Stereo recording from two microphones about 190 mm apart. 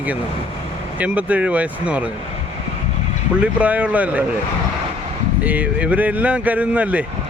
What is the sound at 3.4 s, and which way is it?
Speech, 5° right (ahead or behind).